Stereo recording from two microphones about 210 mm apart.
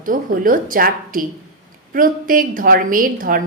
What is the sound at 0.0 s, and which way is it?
A woman's voice, 40° right (ahead or behind).